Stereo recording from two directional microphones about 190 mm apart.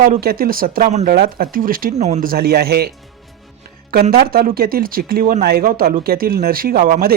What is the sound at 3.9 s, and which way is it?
Speech, 55° right (ahead or behind).